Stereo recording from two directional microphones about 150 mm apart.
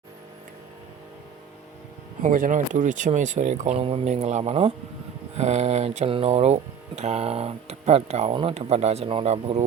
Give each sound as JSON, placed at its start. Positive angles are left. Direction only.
{"t": 2.2, "sound": "speech", "side_deg": -60}